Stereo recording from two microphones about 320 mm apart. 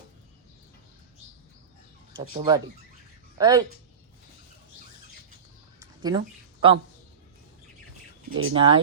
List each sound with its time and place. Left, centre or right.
2.2 s speech: centre
5.8 s a sound: centre
8.3 s speech: right
8.5 s speech: centre